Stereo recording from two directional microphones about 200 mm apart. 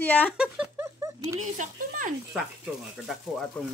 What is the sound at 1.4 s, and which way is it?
Speech, 40° right (ahead or behind).